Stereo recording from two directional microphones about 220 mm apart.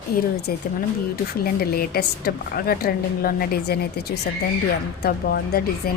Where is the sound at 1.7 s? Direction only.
45° left (ahead or behind).